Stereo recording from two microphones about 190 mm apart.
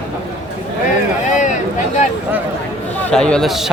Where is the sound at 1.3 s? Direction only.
40° left (ahead or behind).